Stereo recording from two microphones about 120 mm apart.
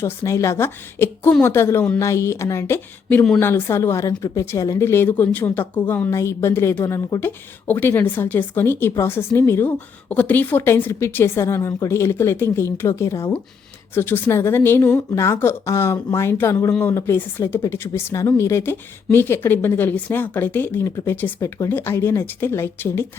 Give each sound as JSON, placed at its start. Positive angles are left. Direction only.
{"t": 0.0, "sound": "speech", "side_deg": 25}